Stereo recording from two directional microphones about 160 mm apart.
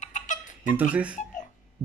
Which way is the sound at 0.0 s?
50° left (ahead or behind).